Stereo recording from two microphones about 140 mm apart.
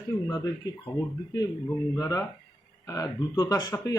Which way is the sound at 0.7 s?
25° left (ahead or behind).